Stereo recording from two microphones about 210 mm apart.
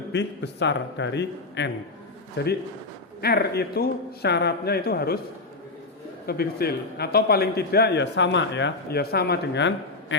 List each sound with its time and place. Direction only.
0.1 s a man's voice: 55° left (ahead or behind)
6.2 s a man's voice: 50° left (ahead or behind)